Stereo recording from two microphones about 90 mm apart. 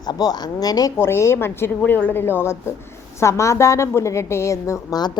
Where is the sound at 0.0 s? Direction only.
50° left (ahead or behind).